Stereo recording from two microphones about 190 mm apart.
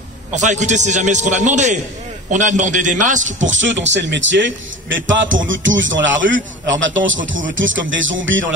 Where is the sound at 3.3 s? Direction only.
80° right.